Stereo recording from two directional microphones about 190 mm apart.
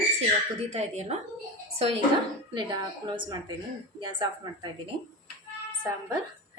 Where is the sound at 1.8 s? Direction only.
30° right (ahead or behind).